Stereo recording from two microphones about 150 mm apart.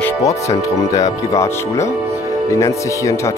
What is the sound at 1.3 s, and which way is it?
Speech, 20° left (ahead or behind).